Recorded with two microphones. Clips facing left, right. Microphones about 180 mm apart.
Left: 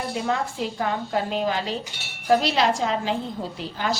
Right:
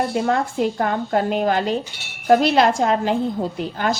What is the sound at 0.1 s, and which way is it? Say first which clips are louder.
A woman's voice: right 5 dB; 50° right (ahead or behind).